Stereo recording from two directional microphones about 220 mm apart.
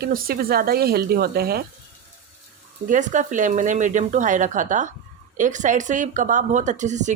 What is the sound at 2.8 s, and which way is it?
A woman's voice, 35° right (ahead or behind).